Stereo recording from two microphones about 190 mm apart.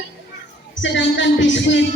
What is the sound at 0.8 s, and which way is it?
Music, 75° left (ahead or behind).